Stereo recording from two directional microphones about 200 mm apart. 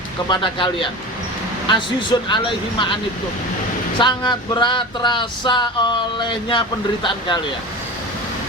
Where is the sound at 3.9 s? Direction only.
20° left (ahead or behind).